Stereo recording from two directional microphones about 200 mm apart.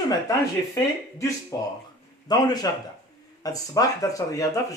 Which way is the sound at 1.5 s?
15° left (ahead or behind).